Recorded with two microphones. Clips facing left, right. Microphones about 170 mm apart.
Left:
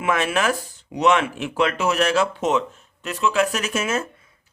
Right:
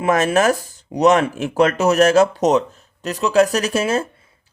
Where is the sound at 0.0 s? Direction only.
40° right (ahead or behind).